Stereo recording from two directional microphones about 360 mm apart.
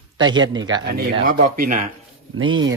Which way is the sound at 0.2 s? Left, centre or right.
Centre.